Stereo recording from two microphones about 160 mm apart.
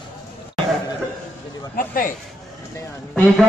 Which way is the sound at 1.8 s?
60° left (ahead or behind).